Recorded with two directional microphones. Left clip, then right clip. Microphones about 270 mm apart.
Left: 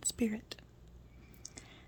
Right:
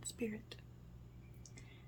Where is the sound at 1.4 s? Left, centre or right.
Left.